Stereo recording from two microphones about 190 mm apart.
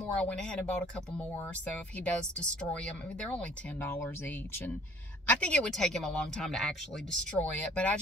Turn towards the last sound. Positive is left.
turn(degrees=5)  # may be behind; listen again after turning